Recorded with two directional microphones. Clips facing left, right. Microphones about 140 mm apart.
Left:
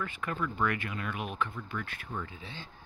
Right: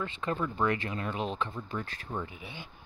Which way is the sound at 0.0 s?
30° right (ahead or behind).